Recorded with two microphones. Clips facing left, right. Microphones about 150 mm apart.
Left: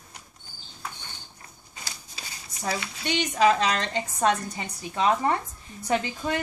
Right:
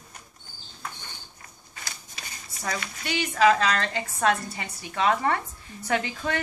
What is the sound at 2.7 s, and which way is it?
A woman's voice, 20° left (ahead or behind).